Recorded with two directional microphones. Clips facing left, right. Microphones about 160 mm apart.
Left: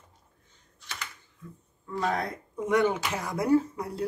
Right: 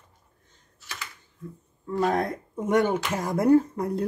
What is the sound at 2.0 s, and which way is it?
Speech, 45° right (ahead or behind).